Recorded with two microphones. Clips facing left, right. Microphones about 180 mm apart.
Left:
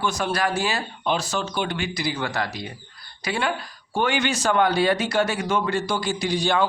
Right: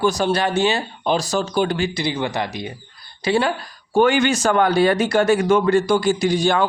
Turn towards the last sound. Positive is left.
turn(degrees=-50)  # may be behind; listen again after turning